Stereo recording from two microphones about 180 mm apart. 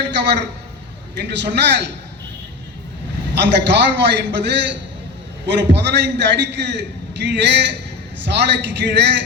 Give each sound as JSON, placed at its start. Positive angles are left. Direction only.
{"t": 0.0, "sound": "a man's voice", "side_deg": -70}
{"t": 3.3, "sound": "a man's voice", "side_deg": -70}